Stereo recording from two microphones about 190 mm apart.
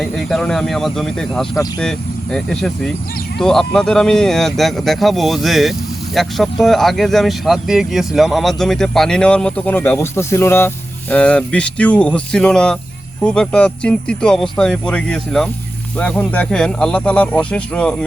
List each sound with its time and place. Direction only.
0.0 s speech: centre (ahead or behind)